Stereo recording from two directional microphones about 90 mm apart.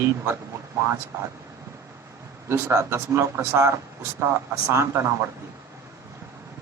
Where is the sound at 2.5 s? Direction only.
30° right (ahead or behind).